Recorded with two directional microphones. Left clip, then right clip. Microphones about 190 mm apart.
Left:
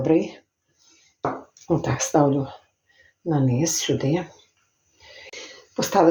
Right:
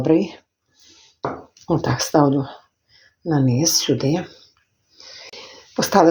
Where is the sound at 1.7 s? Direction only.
35° right (ahead or behind).